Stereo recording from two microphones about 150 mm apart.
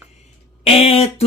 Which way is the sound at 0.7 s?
40° left (ahead or behind).